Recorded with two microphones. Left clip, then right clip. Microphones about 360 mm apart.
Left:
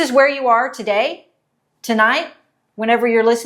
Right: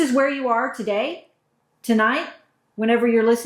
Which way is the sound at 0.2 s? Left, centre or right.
Left.